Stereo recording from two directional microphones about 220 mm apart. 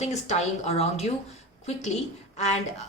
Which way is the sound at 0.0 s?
30° left (ahead or behind).